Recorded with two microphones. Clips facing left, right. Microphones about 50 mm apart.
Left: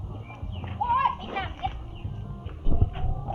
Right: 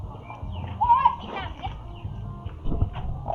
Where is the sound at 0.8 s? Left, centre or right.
Left.